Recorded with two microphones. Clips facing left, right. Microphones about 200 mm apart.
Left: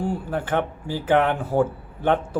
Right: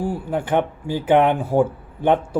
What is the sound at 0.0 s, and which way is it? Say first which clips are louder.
Speech: right 2 dB; 10° right (ahead or behind).